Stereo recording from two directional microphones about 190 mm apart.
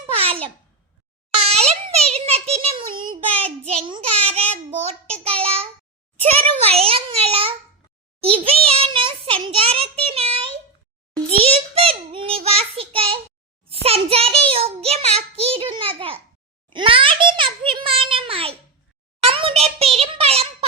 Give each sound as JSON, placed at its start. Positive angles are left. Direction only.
{"t": 0.0, "sound": "babbling", "side_deg": -30}
{"t": 1.3, "sound": "a sound", "side_deg": -35}
{"t": 3.3, "sound": "child singing", "side_deg": -30}
{"t": 6.4, "sound": "a child's voice", "side_deg": -30}
{"t": 11.5, "sound": "a child's voice", "side_deg": -30}
{"t": 12.1, "sound": "child singing", "side_deg": -30}
{"t": 13.8, "sound": "a child's voice", "side_deg": -30}